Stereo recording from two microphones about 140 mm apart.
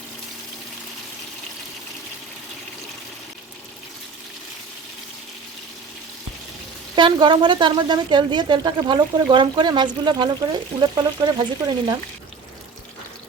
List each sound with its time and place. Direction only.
6.9 s a woman's voice: 35° right (ahead or behind)